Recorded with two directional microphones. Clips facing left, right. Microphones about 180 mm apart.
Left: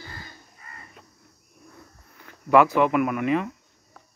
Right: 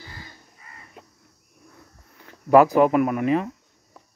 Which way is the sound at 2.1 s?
35° right (ahead or behind).